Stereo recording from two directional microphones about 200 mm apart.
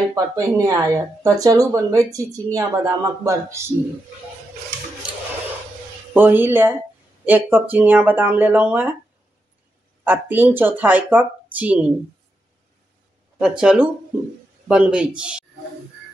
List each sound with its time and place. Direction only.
0.1 s speech: 15° right (ahead or behind)
6.1 s speech: 10° right (ahead or behind)
10.0 s speech: 10° right (ahead or behind)
13.4 s speech: 5° right (ahead or behind)